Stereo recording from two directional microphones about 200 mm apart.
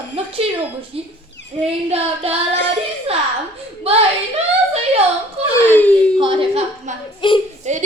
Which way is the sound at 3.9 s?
30° right (ahead or behind).